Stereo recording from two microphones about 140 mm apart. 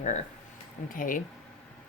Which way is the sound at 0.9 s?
75° left (ahead or behind).